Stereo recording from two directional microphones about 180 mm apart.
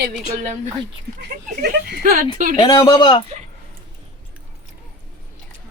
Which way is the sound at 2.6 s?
20° left (ahead or behind).